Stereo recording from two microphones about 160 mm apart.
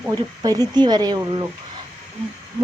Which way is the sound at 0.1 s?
25° right (ahead or behind).